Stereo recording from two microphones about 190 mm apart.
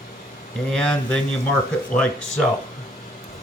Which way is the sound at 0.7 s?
5° left (ahead or behind).